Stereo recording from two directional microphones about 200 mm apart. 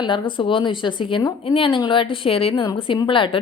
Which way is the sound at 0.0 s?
25° left (ahead or behind).